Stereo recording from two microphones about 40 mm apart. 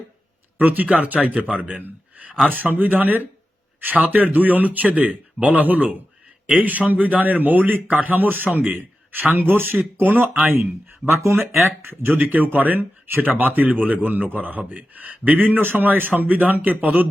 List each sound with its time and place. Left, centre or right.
0.6 s a man's voice: right